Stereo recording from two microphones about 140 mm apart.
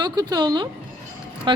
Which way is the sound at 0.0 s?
30° right (ahead or behind).